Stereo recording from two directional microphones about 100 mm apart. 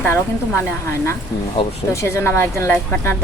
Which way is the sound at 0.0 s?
25° left (ahead or behind).